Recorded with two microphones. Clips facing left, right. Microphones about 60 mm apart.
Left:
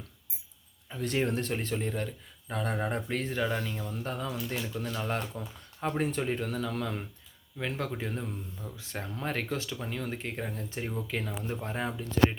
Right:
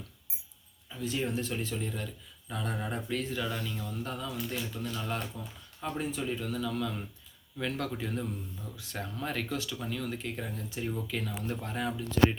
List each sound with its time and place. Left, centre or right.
0.9 s speech: left
1.5 s speech: left
7.6 s speech: left